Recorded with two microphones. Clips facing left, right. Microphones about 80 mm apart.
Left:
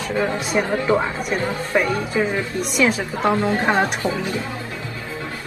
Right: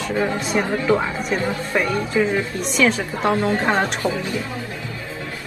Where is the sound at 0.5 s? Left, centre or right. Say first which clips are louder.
Left 1 dB; centre.